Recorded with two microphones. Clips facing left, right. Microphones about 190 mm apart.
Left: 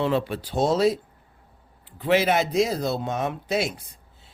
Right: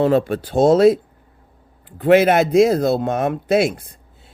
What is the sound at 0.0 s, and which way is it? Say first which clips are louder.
Speech: right 8 dB; 45° right (ahead or behind).